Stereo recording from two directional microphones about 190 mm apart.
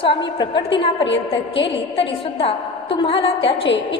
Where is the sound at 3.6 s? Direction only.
70° left (ahead or behind).